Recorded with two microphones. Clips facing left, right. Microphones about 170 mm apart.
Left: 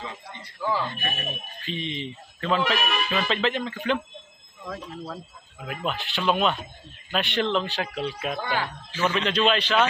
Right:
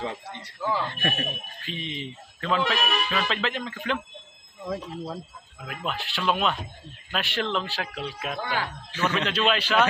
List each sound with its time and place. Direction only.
0.0 s a sound: 65° right (ahead or behind)
0.7 s speech: 10° left (ahead or behind)
1.7 s a man's voice: 5° right (ahead or behind)
4.6 s speech: 20° right (ahead or behind)
5.6 s a man's voice: centre (ahead or behind)